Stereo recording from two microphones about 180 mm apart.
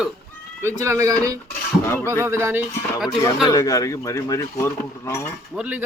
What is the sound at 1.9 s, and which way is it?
Speech, 10° left (ahead or behind).